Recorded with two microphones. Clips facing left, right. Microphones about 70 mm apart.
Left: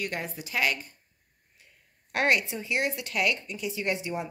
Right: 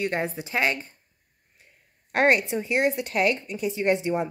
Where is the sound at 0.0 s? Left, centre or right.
Right.